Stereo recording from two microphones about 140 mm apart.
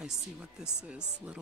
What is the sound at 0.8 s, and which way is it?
Speech, 5° right (ahead or behind).